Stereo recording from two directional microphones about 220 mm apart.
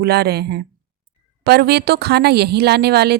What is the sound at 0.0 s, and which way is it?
A woman's voice, 45° right (ahead or behind).